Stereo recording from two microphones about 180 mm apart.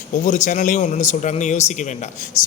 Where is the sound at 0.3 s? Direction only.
45° left (ahead or behind).